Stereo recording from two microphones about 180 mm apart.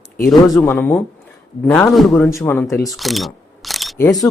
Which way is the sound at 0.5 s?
15° left (ahead or behind).